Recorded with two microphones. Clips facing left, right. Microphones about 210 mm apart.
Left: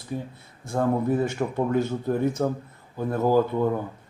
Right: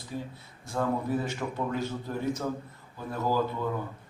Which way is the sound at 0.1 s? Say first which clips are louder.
Left 5 dB; 55° left (ahead or behind).